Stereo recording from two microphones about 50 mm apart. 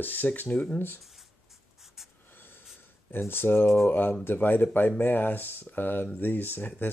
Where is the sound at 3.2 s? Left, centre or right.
Left.